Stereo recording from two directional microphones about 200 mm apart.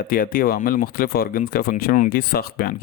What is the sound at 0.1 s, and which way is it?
Speech, 45° left (ahead or behind).